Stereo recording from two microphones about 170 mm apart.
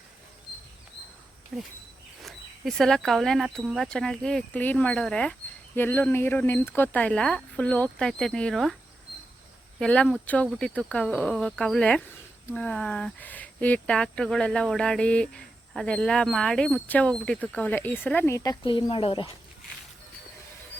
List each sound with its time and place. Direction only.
1.5 s speech: centre (ahead or behind)
9.8 s speech: 5° left (ahead or behind)
18.6 s speech: 30° left (ahead or behind)